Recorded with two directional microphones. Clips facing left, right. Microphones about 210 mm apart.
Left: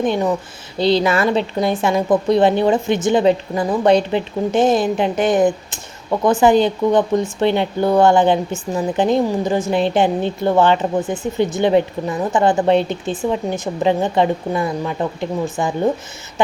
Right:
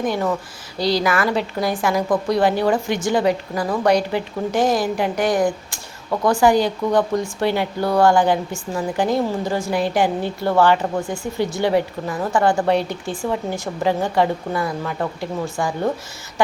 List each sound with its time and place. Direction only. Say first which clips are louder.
0.0 s a woman's voice: left 3 dB; 20° left (ahead or behind)